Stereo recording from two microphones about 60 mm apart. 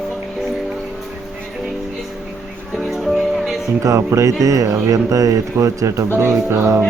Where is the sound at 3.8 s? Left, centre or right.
Right.